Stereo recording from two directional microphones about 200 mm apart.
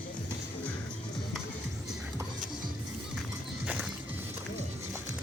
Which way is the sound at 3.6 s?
5° right (ahead or behind).